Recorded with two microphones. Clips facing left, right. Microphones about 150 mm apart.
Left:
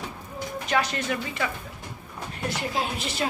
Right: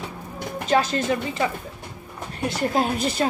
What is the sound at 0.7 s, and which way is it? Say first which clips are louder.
Speech: right 6 dB; 30° right (ahead or behind).